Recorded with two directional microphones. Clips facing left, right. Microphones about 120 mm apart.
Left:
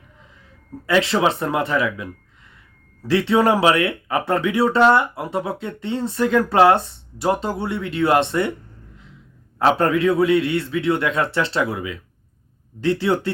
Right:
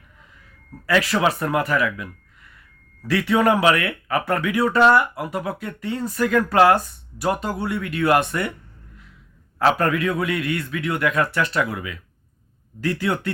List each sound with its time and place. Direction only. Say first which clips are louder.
0.9 s speech: left 2 dB; 25° left (ahead or behind)
9.6 s speech: left 2 dB; 25° left (ahead or behind)